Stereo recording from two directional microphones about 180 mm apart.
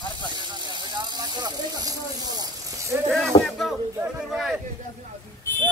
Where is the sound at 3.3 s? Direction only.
30° left (ahead or behind).